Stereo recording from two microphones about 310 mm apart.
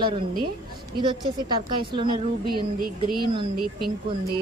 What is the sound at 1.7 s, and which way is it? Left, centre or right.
Speech, centre.